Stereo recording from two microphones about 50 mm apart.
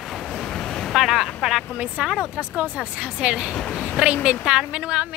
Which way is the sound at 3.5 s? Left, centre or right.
Centre.